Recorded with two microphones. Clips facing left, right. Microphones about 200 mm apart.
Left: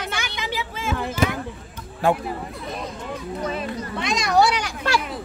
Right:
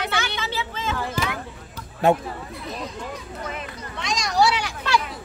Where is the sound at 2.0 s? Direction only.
20° right (ahead or behind).